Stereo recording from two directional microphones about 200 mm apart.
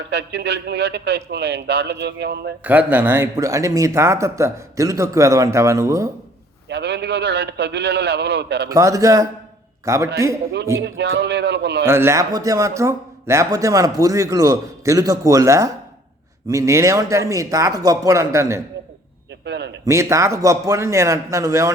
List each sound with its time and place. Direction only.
0.1 s a man's voice: 60° right (ahead or behind)
2.6 s speech: 5° right (ahead or behind)
6.7 s a man's voice: 60° right (ahead or behind)
8.7 s a man's voice: 15° right (ahead or behind)
10.8 s a man's voice: 60° right (ahead or behind)
11.9 s speech: 10° right (ahead or behind)
19.5 s a man's voice: 60° right (ahead or behind)
19.8 s speech: 15° right (ahead or behind)